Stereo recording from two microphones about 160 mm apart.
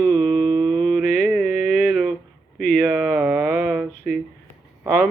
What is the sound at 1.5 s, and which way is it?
Mantra, 60° left (ahead or behind).